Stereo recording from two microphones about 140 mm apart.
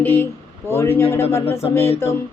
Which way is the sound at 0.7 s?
15° left (ahead or behind).